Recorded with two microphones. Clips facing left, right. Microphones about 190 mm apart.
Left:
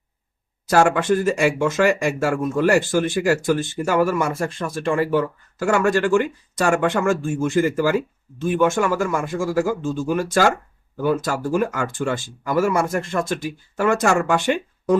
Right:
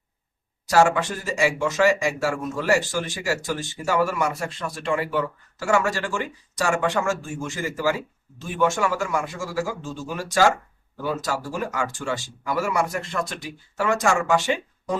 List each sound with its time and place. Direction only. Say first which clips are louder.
0.7 s speech: left 3 dB; 60° left (ahead or behind)